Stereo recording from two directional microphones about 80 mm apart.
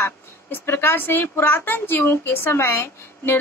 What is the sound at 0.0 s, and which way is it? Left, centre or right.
A woman's voice, left.